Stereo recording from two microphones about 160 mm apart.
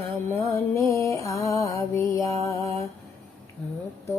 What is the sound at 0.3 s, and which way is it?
Music, 15° left (ahead or behind).